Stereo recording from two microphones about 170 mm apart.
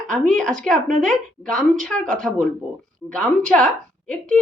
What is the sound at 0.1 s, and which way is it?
Speech, 5° left (ahead or behind).